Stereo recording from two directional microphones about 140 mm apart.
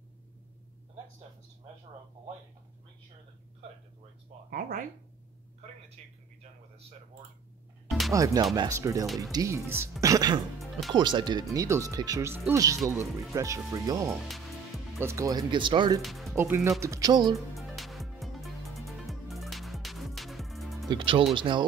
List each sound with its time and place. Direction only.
6.0 s speech: 50° right (ahead or behind)
8.1 s speech: 25° right (ahead or behind)
9.0 s speech: centre (ahead or behind)
9.3 s speech: 25° right (ahead or behind)
10.6 s music: centre (ahead or behind)
10.9 s speech: 35° right (ahead or behind)
11.5 s speech: 20° right (ahead or behind)
16.0 s speech: centre (ahead or behind)
16.3 s speech: 15° right (ahead or behind)
17.3 s music: centre (ahead or behind)
20.9 s speech: 35° right (ahead or behind)